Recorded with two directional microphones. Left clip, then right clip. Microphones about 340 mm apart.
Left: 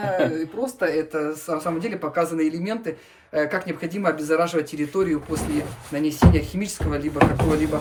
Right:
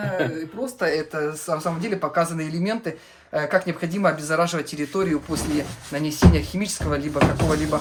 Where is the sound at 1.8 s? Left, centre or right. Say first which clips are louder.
Right 1 dB; centre.